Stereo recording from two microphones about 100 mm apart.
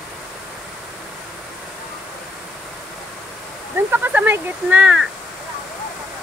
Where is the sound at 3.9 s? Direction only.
15° right (ahead or behind).